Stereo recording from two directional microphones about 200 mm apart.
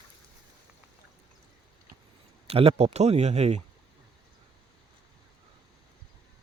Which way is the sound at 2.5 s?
30° right (ahead or behind).